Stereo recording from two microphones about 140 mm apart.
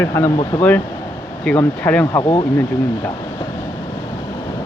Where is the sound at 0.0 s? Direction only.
20° left (ahead or behind).